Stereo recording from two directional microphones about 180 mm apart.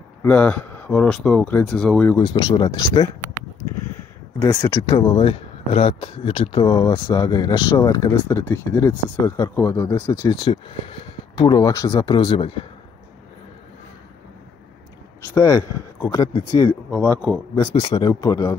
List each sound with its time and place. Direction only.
0.2 s speech: 5° left (ahead or behind)
2.1 s speech: 20° left (ahead or behind)
4.4 s speech: 20° left (ahead or behind)
15.3 s speech: 15° left (ahead or behind)
16.9 s speech: 10° left (ahead or behind)
17.7 s speech: 30° left (ahead or behind)